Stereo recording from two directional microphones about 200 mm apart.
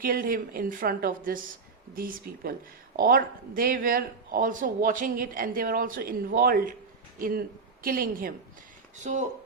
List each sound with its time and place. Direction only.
0.0 s speech: 45° right (ahead or behind)
9.1 s speech: 35° right (ahead or behind)